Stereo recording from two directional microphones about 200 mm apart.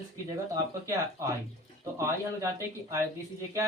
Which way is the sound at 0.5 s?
15° right (ahead or behind).